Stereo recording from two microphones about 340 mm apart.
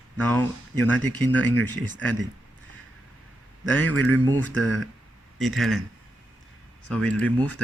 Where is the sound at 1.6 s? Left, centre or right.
Right.